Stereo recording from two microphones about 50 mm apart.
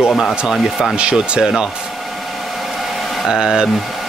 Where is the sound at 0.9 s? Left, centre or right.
Right.